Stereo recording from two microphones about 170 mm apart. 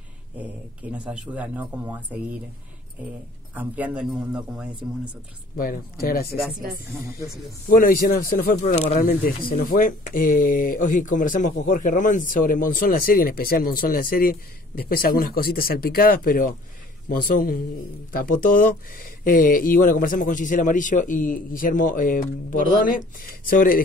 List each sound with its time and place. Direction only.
0.3 s a sound: 10° right (ahead or behind)
0.9 s speech: 5° right (ahead or behind)
3.5 s speech: 10° right (ahead or behind)
5.6 s speech: 60° left (ahead or behind)
7.6 s speech: 60° left (ahead or behind)